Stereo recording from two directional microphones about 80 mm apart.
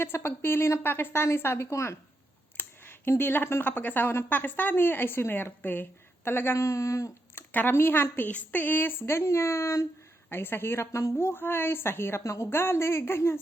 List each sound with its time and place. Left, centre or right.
0.0 s a woman's voice: left
2.6 s speech: left
7.5 s a woman's voice: left